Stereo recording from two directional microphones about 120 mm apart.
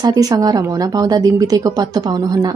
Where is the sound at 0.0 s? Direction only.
30° right (ahead or behind).